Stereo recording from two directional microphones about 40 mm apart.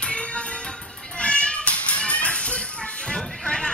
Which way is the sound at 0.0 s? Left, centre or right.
Left.